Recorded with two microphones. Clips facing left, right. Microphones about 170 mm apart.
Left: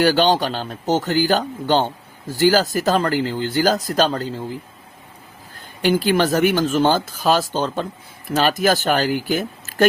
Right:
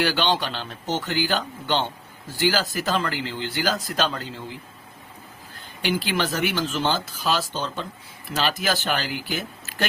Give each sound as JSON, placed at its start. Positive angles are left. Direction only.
{"t": 0.0, "sound": "speech", "side_deg": 40}
{"t": 5.8, "sound": "speech", "side_deg": 45}